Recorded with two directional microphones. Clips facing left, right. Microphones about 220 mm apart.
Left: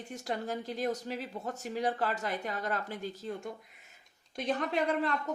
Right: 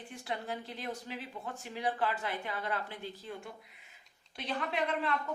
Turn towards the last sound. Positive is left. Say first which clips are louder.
# left 3 dB
turn(degrees=40)  # may be behind; listen again after turning